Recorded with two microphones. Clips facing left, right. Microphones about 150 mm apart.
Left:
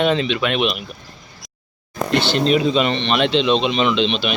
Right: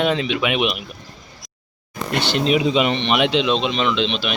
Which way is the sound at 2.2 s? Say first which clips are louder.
Even; 10° right (ahead or behind).